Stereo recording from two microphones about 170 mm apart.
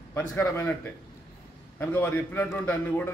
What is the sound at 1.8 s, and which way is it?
A man's voice, 10° left (ahead or behind).